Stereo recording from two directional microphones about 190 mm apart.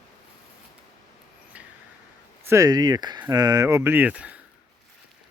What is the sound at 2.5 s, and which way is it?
Speech, 15° right (ahead or behind).